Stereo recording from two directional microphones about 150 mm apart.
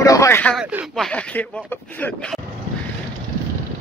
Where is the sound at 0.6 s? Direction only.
5° right (ahead or behind).